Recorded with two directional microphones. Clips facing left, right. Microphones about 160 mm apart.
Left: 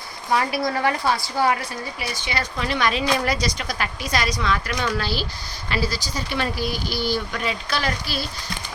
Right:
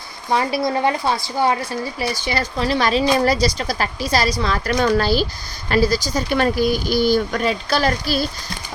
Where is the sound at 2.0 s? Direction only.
35° right (ahead or behind).